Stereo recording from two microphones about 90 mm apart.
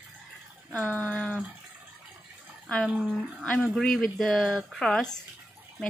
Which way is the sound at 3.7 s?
5° left (ahead or behind).